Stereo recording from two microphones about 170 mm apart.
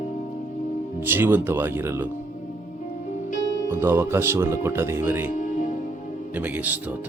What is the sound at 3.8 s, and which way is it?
Speech, 15° right (ahead or behind).